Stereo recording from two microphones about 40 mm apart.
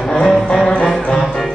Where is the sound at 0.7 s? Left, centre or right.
Left.